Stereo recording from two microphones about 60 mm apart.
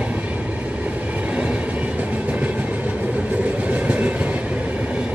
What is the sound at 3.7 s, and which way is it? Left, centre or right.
Train, right.